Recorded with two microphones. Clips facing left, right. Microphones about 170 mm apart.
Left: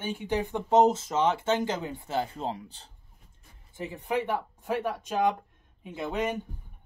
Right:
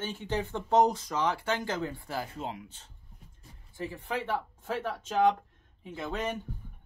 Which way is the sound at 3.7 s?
20° left (ahead or behind).